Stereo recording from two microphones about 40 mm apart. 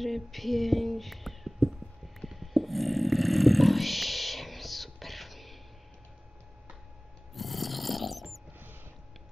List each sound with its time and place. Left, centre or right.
0.0 s speech: centre
2.2 s a sound: centre
7.3 s snoring: centre